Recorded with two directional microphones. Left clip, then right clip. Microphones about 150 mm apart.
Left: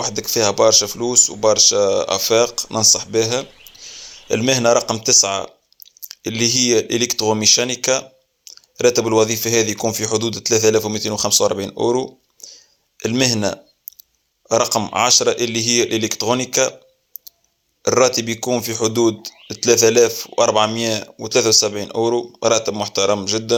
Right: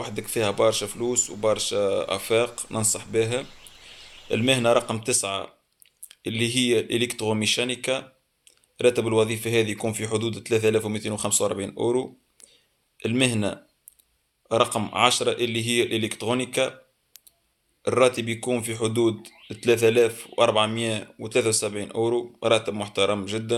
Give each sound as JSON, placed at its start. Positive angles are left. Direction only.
{"t": 0.0, "sound": "speech", "side_deg": 30}
{"t": 17.8, "sound": "speech", "side_deg": 30}